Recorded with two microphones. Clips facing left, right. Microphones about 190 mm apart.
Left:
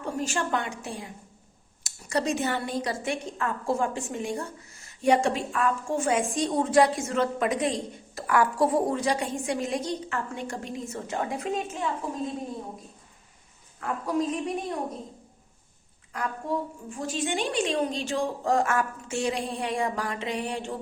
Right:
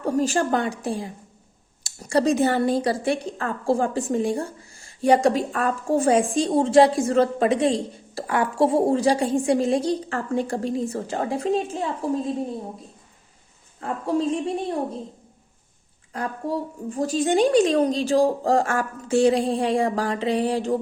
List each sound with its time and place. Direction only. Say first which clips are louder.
0.0 s a woman's voice: right 8 dB; 35° right (ahead or behind)
13.7 s a woman's voice: right 3 dB; 30° right (ahead or behind)
16.1 s a woman's voice: right 3 dB; 35° right (ahead or behind)